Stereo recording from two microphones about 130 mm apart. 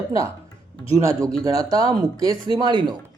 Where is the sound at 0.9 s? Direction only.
25° right (ahead or behind).